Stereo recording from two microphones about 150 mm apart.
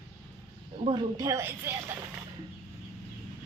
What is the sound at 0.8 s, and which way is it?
Speech, 35° right (ahead or behind).